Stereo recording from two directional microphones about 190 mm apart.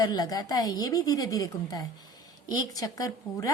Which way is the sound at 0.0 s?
20° left (ahead or behind).